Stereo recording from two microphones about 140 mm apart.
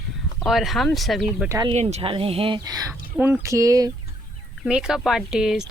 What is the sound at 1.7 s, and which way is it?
Speech, 50° right (ahead or behind).